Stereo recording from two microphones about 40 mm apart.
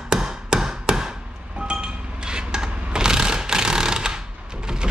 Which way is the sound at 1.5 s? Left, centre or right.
Right.